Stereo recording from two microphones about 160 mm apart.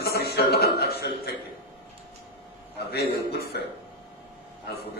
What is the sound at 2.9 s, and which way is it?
Speech, 85° left.